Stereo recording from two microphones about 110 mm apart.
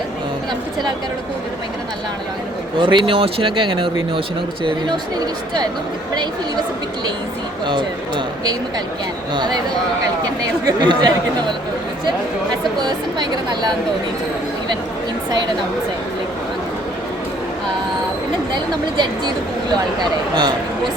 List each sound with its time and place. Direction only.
2.7 s speech: 45° right (ahead or behind)
7.7 s speech: 45° right (ahead or behind)
10.7 s speech: 40° right (ahead or behind)
12.8 s speech: 40° right (ahead or behind)
18.5 s speech: 40° right (ahead or behind)